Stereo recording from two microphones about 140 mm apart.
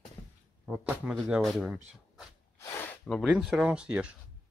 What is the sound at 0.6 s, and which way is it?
Speech, 5° right (ahead or behind).